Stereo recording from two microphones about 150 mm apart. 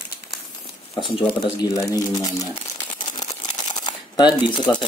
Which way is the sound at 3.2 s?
25° left (ahead or behind).